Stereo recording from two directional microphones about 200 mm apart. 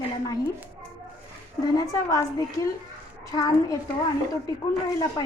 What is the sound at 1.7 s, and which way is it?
Speech, 15° left (ahead or behind).